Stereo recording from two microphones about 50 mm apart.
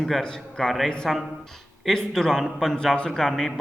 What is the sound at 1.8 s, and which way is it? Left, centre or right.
A man's voice, centre.